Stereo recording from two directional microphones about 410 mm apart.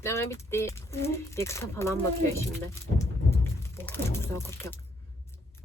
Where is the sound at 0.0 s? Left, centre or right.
Centre.